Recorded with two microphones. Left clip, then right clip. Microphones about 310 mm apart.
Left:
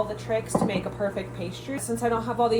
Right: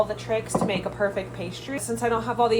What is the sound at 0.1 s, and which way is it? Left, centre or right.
A woman's voice, centre.